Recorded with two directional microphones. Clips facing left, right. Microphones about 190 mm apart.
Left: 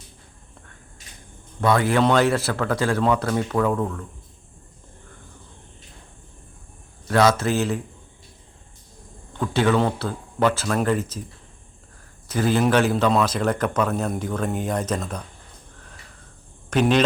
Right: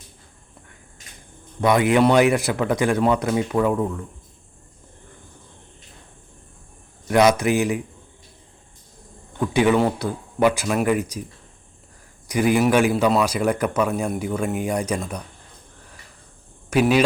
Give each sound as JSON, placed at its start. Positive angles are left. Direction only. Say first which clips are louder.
{"t": 1.6, "sound": "a man's voice", "louder": "right 2 dB", "side_deg": -15}
{"t": 7.1, "sound": "a man's voice", "louder": "right 2 dB", "side_deg": -15}
{"t": 9.4, "sound": "a man's voice", "louder": "right 2 dB", "side_deg": -15}
{"t": 12.3, "sound": "a man's voice", "louder": "right 2 dB", "side_deg": -15}
{"t": 16.6, "sound": "speech", "louder": "right 1 dB", "side_deg": -10}